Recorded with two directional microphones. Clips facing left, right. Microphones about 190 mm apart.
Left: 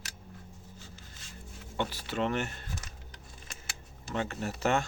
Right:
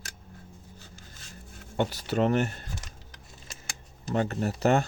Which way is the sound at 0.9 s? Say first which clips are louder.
Right 2 dB; 45° right (ahead or behind).